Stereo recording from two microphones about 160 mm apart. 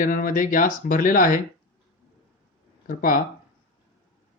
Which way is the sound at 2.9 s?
60° left (ahead or behind).